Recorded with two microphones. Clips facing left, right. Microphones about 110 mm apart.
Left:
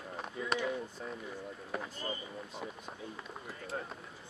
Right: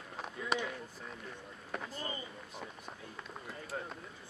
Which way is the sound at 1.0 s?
5° left (ahead or behind).